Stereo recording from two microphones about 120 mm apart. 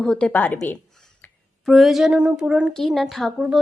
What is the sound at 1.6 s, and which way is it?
A woman's voice, centre (ahead or behind).